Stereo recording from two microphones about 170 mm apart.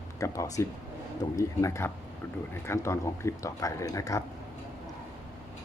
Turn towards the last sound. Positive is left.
turn(degrees=20)  # may be behind; listen again after turning